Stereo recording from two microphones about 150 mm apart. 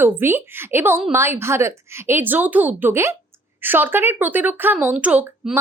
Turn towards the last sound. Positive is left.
turn(degrees=-10)  # may be behind; listen again after turning